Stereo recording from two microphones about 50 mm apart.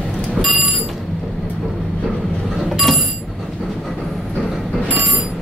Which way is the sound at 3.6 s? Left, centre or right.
Centre.